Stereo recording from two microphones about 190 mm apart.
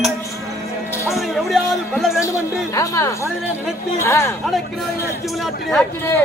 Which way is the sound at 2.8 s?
15° left (ahead or behind).